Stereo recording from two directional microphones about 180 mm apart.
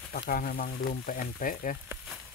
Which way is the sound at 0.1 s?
50° left (ahead or behind).